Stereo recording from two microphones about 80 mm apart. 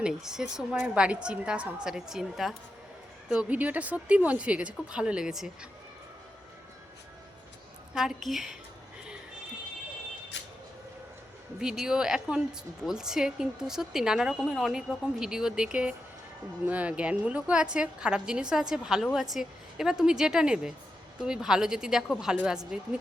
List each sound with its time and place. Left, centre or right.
0.0 s a woman's voice: centre
3.5 s a woman's voice: centre
7.9 s a woman's voice: centre
11.6 s a woman's voice: centre